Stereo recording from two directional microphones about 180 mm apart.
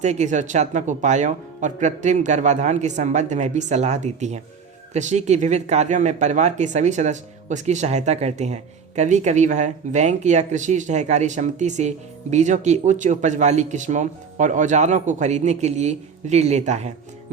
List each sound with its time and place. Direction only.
0.0 s speech: 40° right (ahead or behind)